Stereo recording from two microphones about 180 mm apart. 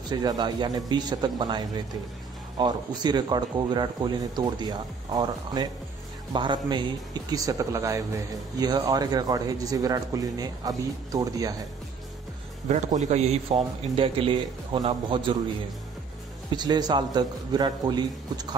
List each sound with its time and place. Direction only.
0.1 s speech: 20° right (ahead or behind)
12.6 s a man's voice: 40° right (ahead or behind)
16.4 s speech: 25° right (ahead or behind)